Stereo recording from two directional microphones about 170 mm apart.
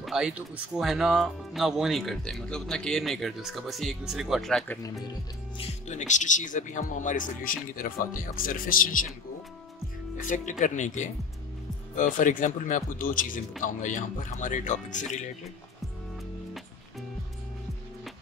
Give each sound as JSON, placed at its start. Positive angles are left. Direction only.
{"t": 0.0, "sound": "speech", "side_deg": -5}
{"t": 5.6, "sound": "speech", "side_deg": 45}
{"t": 10.2, "sound": "speech", "side_deg": 50}